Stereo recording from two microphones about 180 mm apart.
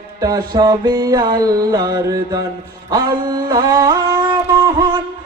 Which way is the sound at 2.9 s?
20° right (ahead or behind).